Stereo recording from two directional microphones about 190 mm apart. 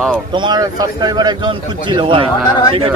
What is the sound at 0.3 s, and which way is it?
Speech, 25° right (ahead or behind).